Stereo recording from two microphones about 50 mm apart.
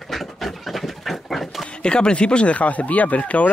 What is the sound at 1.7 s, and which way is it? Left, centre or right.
Speech, centre.